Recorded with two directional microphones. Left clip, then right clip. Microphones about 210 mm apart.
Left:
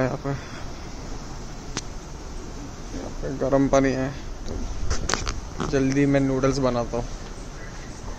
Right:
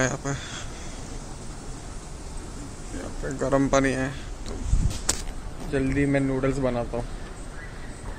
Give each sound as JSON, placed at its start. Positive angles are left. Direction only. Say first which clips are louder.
{"t": 0.0, "sound": "speech", "louder": "even", "side_deg": 0}
{"t": 3.3, "sound": "speech", "louder": "left 2 dB", "side_deg": 0}
{"t": 5.7, "sound": "a man's voice", "louder": "left 3 dB", "side_deg": 15}